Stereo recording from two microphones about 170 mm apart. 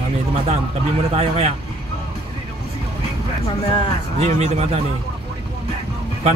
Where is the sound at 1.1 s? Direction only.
35° right (ahead or behind).